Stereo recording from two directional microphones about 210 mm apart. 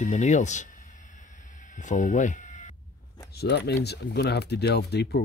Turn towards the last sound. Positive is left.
turn(degrees=50)  # may be behind; listen again after turning